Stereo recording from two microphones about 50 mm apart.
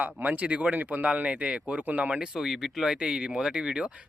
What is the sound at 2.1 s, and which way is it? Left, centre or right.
Speech, centre.